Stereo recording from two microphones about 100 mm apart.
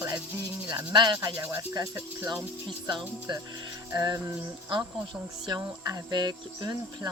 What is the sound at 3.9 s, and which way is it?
Speech, 35° right (ahead or behind).